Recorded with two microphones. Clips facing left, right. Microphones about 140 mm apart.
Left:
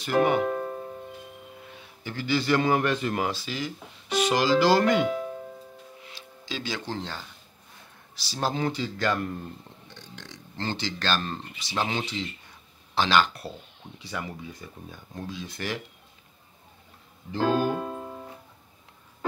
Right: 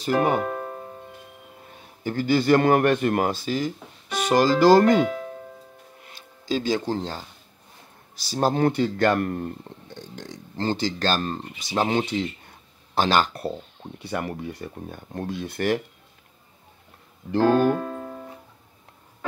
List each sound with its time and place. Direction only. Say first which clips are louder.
0.0 s speech: right 1 dB; 40° right (ahead or behind)
1.6 s speech: right 6 dB; 45° right (ahead or behind)
6.0 s a man's voice: right 12 dB; 50° right (ahead or behind)
17.3 s music: right 6 dB; 65° right (ahead or behind)